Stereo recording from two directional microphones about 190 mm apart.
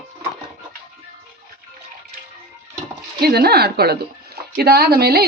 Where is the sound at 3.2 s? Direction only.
55° right (ahead or behind).